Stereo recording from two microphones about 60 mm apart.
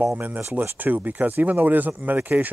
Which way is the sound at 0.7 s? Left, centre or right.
Right.